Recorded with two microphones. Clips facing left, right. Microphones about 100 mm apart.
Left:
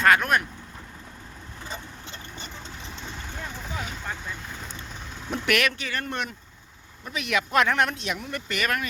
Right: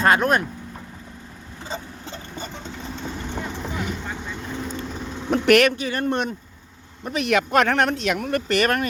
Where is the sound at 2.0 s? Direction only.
40° right (ahead or behind).